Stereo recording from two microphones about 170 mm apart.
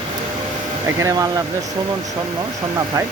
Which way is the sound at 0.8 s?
20° right (ahead or behind).